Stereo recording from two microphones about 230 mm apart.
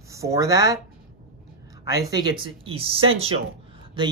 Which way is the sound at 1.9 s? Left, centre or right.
Centre.